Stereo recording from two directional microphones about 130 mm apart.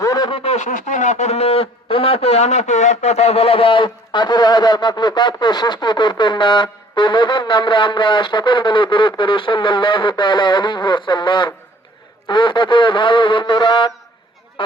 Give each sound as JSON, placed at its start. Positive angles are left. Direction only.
{"t": 0.0, "sound": "a sound", "side_deg": 25}
{"t": 0.3, "sound": "speech", "side_deg": 40}
{"t": 0.5, "sound": "speech", "side_deg": 70}